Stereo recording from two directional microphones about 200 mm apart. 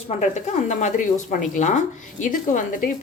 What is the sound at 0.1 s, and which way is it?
Speech, 35° left (ahead or behind).